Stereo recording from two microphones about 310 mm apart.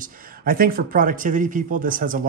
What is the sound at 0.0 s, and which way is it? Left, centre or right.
Speech, right.